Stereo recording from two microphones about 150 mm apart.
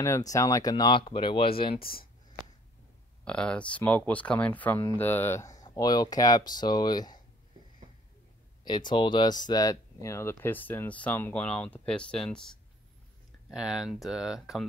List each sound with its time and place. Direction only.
0.0 s speech: 20° left (ahead or behind); by 1.8 s 35° left (ahead or behind)
1.8 s speech: 80° left
3.3 s speech: 5° left (ahead or behind); by 7.2 s 30° left (ahead or behind)
8.6 s speech: 30° left (ahead or behind); by 14.7 s centre (ahead or behind)